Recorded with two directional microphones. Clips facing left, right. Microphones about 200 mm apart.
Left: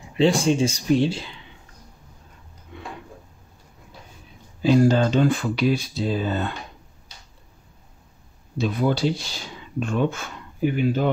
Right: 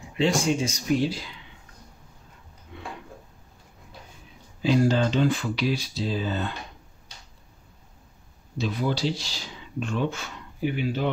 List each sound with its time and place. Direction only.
0.2 s speech: 30° left (ahead or behind)
4.6 s speech: 50° left (ahead or behind)
8.5 s speech: 55° left (ahead or behind)